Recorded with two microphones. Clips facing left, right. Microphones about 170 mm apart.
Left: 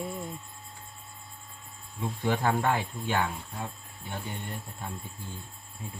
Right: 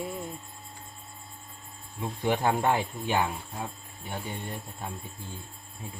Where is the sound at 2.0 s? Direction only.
15° right (ahead or behind).